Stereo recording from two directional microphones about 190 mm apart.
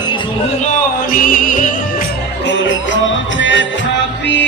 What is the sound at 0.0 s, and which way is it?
Music, 25° left (ahead or behind).